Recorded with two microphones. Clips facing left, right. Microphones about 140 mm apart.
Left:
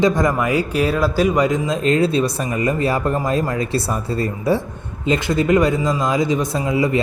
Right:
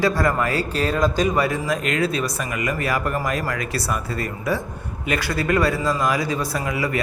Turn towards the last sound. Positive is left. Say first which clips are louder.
# left 6 dB
turn(degrees=25)  # may be behind; listen again after turning